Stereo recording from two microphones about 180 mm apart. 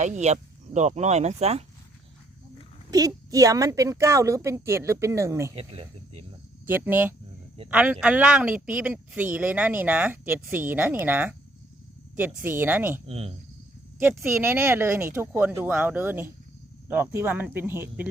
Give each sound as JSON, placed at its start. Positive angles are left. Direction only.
{"t": 0.0, "sound": "speech", "side_deg": -40}
{"t": 2.9, "sound": "a woman's voice", "side_deg": -20}
{"t": 5.5, "sound": "speech", "side_deg": -35}
{"t": 6.7, "sound": "speech", "side_deg": -10}
{"t": 13.1, "sound": "speech", "side_deg": -30}
{"t": 14.4, "sound": "speech", "side_deg": -15}